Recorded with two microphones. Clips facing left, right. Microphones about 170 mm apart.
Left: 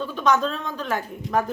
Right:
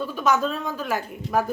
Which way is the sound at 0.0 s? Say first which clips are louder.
Left 1 dB; 10° right (ahead or behind).